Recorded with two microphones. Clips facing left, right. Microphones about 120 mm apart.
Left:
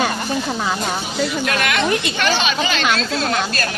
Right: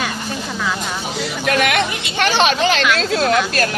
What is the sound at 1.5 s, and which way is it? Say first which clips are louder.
Speech: right 5 dB; 65° right (ahead or behind).